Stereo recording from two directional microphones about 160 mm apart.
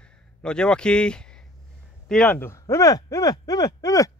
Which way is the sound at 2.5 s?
20° left (ahead or behind).